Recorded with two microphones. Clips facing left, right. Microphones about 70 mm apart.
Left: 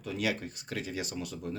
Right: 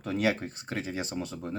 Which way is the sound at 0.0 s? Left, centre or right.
Right.